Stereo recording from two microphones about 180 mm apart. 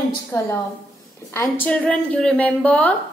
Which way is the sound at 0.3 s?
15° left (ahead or behind).